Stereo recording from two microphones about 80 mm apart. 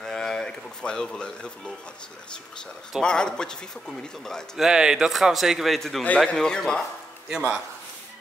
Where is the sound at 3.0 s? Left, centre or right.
Centre.